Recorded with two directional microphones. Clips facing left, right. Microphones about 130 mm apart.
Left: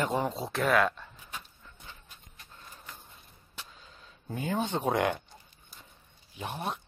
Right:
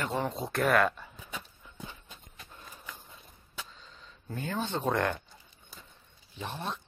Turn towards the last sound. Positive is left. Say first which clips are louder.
# left 2 dB
turn(degrees=15)  # may be behind; listen again after turning